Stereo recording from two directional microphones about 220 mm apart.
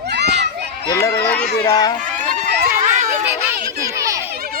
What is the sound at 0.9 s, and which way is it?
Speech, 15° left (ahead or behind).